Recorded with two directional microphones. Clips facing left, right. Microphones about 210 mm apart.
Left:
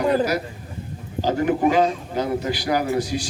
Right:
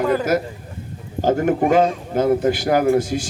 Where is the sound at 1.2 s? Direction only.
50° right (ahead or behind).